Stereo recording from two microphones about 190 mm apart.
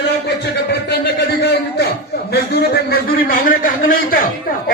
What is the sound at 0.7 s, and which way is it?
A man's voice, 60° left (ahead or behind).